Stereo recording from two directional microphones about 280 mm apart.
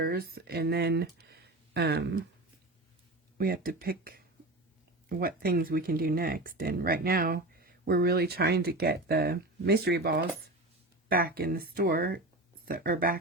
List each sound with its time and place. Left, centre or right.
0.0 s speech: right
3.3 s speech: right